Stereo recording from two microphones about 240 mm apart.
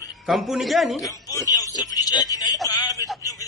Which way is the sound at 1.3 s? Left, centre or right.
Centre.